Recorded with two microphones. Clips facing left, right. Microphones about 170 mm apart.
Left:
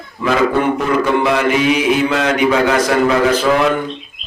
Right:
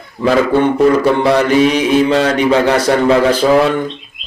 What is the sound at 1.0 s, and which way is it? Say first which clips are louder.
Speech: right 3 dB; 35° right (ahead or behind).